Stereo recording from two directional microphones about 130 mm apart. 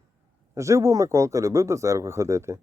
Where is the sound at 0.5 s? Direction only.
25° right (ahead or behind).